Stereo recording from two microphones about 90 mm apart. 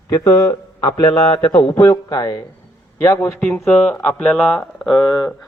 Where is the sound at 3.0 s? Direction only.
30° left (ahead or behind).